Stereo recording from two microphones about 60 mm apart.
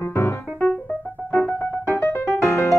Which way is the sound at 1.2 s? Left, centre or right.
Left.